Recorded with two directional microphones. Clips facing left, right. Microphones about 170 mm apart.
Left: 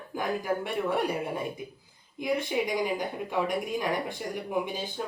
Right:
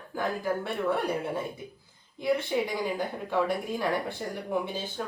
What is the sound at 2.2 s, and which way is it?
Speech, 15° left (ahead or behind).